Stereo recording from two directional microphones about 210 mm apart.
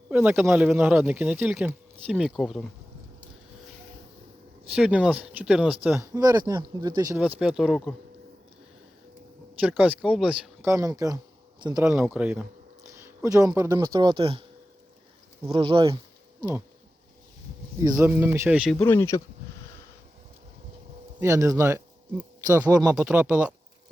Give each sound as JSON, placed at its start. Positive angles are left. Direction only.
{"t": 0.1, "sound": "speech", "side_deg": -5}
{"t": 4.7, "sound": "speech", "side_deg": -5}
{"t": 7.2, "sound": "speech", "side_deg": -5}
{"t": 9.6, "sound": "speech", "side_deg": -5}
{"t": 11.9, "sound": "speech", "side_deg": -5}
{"t": 15.5, "sound": "speech", "side_deg": -20}
{"t": 17.9, "sound": "speech", "side_deg": -10}
{"t": 18.8, "sound": "speech", "side_deg": 10}
{"t": 21.2, "sound": "speech", "side_deg": -15}